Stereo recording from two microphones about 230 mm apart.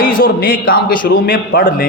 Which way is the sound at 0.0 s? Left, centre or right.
Left.